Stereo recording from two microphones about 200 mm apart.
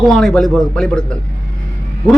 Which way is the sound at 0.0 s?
Centre (ahead or behind).